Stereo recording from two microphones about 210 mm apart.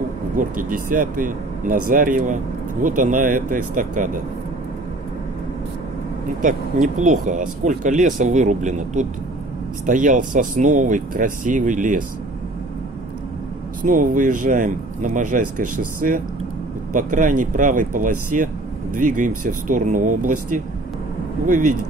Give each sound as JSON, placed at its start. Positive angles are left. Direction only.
{"t": 0.4, "sound": "speech", "side_deg": -40}
{"t": 6.4, "sound": "speech", "side_deg": -40}
{"t": 13.8, "sound": "speech", "side_deg": -40}